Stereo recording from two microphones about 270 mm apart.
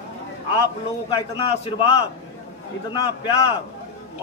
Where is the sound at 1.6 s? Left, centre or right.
Centre.